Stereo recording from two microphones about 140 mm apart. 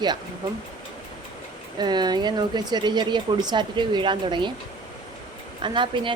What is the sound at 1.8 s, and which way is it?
A woman's voice, 30° right (ahead or behind).